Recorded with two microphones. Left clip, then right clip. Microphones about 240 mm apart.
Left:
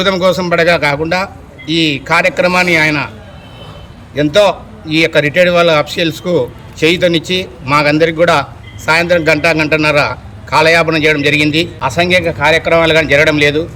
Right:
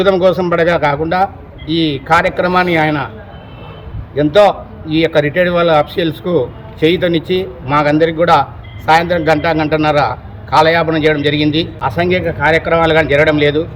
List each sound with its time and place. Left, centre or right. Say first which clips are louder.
0.0 s a man's voice: right 1 dB; centre
4.1 s a man's voice: right 1 dB; centre